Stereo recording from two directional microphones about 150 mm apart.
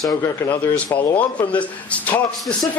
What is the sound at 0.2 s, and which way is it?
A man's voice, 10° left (ahead or behind).